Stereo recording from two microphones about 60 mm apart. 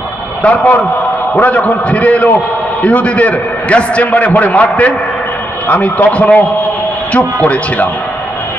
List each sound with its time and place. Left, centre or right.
0.4 s a man's voice: left
7.4 s a man's voice: left